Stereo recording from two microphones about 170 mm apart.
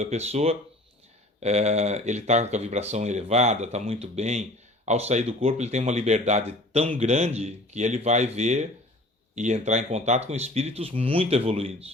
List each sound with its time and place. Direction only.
0.0 s speech: 40° right (ahead or behind)